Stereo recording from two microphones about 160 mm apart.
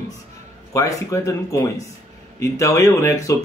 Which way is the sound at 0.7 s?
20° left (ahead or behind).